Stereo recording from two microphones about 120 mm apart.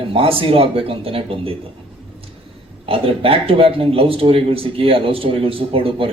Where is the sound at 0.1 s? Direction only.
50° right (ahead or behind).